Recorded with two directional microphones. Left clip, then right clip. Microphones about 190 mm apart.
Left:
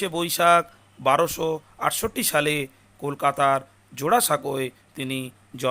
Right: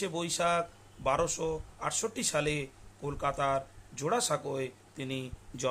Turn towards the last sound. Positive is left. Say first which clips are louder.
# left 7 dB
turn(degrees=20)  # may be behind; listen again after turning